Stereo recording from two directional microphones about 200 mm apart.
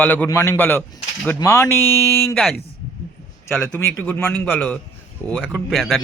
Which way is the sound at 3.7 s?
10° left (ahead or behind).